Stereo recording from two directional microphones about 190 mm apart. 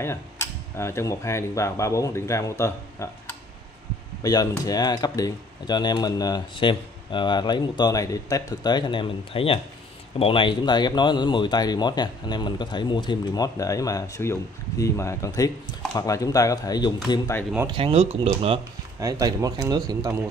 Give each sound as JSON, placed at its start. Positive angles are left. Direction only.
{"t": 0.0, "sound": "speech", "side_deg": 15}
{"t": 4.2, "sound": "speech", "side_deg": 20}
{"t": 17.6, "sound": "speech", "side_deg": -25}
{"t": 18.9, "sound": "speech", "side_deg": -20}